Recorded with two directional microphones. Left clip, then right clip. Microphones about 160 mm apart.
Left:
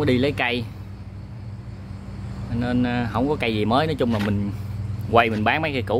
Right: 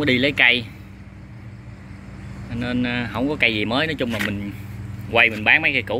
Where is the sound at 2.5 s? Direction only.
10° left (ahead or behind).